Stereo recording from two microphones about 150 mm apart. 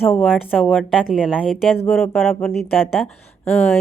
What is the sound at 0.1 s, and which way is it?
A woman's voice, centre (ahead or behind).